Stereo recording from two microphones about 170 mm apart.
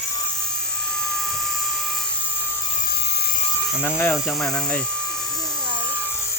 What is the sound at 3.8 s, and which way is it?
Speech, 15° left (ahead or behind).